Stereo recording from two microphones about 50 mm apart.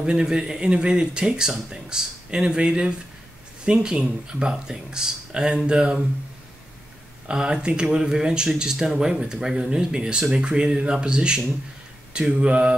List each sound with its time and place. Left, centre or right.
0.0 s speech: centre
7.2 s speech: centre